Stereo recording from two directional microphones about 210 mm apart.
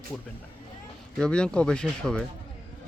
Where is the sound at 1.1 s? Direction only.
5° left (ahead or behind).